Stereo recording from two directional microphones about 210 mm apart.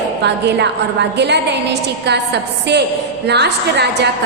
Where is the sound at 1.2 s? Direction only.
55° right (ahead or behind).